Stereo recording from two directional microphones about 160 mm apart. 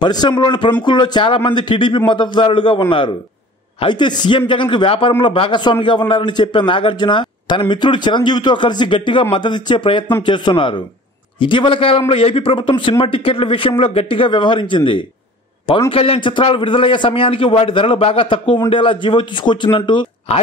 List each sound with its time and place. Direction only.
0.0 s a man's voice: 25° left (ahead or behind)